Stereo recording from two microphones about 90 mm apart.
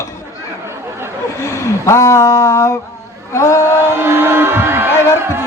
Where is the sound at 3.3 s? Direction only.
35° left (ahead or behind).